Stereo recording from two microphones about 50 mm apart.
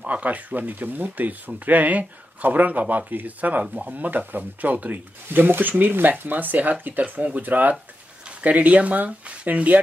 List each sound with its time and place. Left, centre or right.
0.0 s speech: right